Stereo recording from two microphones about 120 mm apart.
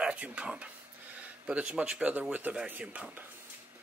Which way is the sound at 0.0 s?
10° right (ahead or behind).